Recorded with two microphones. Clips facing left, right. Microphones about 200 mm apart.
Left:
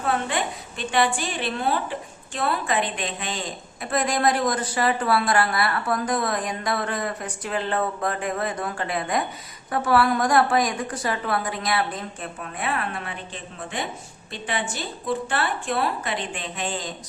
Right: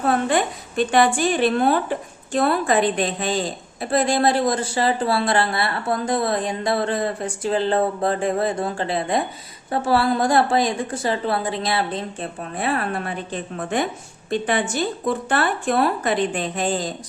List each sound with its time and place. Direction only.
0.9 s a woman's voice: 45° right (ahead or behind)
14.3 s a woman's voice: 50° right (ahead or behind)